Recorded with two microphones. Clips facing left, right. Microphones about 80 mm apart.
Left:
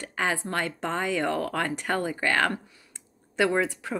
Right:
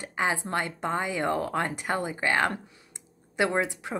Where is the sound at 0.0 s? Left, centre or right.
Centre.